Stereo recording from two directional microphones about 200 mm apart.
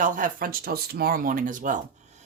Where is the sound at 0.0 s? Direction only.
45° right (ahead or behind).